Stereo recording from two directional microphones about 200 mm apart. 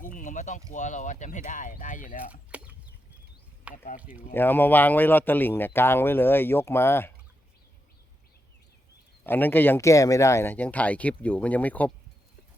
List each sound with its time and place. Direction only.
0.0 s a sound: 40° left (ahead or behind)
0.7 s speech: 40° left (ahead or behind)
2.3 s a sound: 5° right (ahead or behind)
3.7 s speech: 5° right (ahead or behind)
4.4 s speech: 10° left (ahead or behind)
9.2 s speech: 10° left (ahead or behind)